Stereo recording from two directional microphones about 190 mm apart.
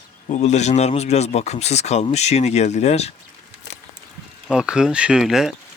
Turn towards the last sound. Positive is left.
turn(degrees=0)  # may be behind; listen again after turning